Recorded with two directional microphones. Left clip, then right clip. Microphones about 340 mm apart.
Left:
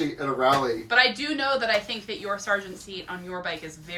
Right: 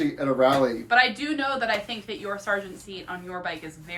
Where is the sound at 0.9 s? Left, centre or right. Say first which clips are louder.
Left 1 dB; centre.